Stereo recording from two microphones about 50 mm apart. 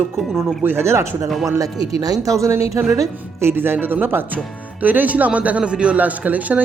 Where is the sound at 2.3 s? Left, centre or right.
Right.